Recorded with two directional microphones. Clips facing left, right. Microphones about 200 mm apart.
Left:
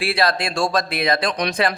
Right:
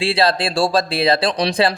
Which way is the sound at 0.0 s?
30° right (ahead or behind).